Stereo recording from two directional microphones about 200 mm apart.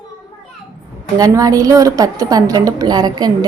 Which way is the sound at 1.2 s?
15° right (ahead or behind).